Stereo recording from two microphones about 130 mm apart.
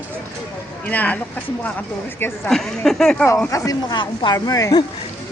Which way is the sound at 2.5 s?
5° left (ahead or behind).